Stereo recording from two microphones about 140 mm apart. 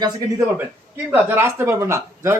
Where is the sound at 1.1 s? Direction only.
15° right (ahead or behind).